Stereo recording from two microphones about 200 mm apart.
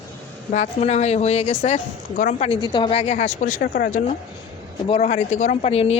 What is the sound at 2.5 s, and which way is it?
Speech, 25° left (ahead or behind).